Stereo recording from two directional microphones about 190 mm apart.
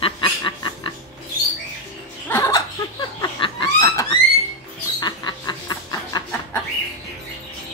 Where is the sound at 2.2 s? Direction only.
15° left (ahead or behind).